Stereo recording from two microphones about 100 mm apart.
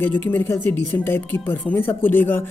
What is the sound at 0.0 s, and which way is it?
Speech, 20° left (ahead or behind).